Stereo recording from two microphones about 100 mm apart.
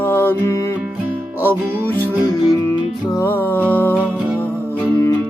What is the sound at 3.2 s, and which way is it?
Music, 20° left (ahead or behind).